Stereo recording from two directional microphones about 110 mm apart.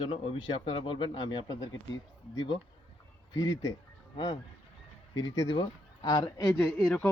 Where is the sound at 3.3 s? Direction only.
40° left (ahead or behind).